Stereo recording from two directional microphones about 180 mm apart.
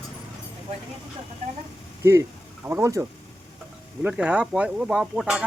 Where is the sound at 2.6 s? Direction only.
15° right (ahead or behind).